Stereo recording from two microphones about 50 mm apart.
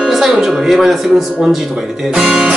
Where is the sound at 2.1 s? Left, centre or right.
Centre.